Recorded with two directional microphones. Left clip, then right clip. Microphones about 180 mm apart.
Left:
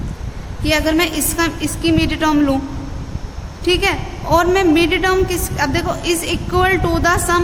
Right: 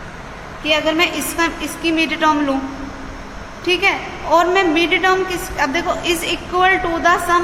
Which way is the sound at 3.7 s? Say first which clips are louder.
Even; 40° left (ahead or behind).